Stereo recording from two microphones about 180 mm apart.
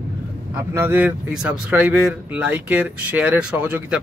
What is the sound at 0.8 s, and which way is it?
Speech, 10° right (ahead or behind).